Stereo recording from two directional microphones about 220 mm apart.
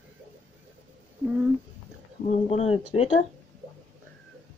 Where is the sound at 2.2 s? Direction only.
30° left (ahead or behind).